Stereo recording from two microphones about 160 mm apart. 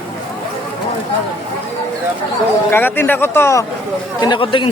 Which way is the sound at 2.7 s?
15° left (ahead or behind).